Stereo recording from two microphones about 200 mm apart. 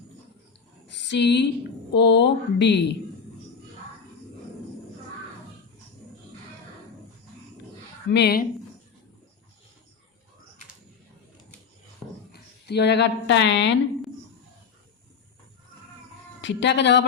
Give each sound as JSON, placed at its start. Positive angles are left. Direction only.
{"t": 0.9, "sound": "a sound", "side_deg": 60}
{"t": 1.9, "sound": "speech", "side_deg": 60}
{"t": 8.1, "sound": "speech", "side_deg": 55}
{"t": 12.3, "sound": "speech", "side_deg": 55}
{"t": 16.4, "sound": "speech", "side_deg": 65}